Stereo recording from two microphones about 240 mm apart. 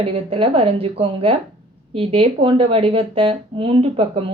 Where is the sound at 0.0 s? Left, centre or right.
Right.